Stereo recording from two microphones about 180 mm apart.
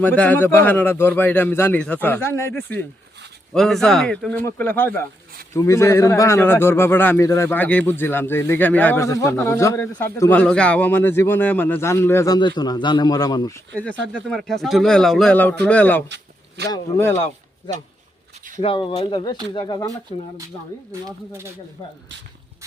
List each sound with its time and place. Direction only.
0.0 s speech: 10° left (ahead or behind)
13.7 s speech: 5° left (ahead or behind)
16.0 s a sound: 75° right (ahead or behind)
16.6 s speech: 15° left (ahead or behind)
18.6 s speech: 30° left (ahead or behind)